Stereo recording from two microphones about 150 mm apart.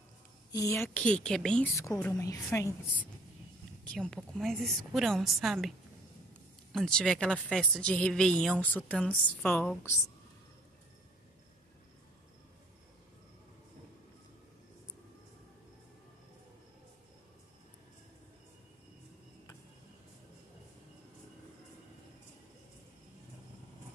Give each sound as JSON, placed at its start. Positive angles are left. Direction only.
{"t": 0.5, "sound": "a woman's voice", "side_deg": 20}
{"t": 2.1, "sound": "a woman's voice", "side_deg": 20}
{"t": 3.9, "sound": "speech", "side_deg": 5}